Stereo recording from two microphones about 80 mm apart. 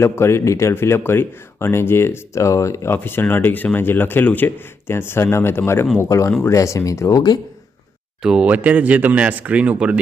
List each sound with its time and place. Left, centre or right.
0.0 s speech: left
8.2 s speech: centre